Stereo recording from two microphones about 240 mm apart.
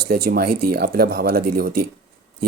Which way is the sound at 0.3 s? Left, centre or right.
Right.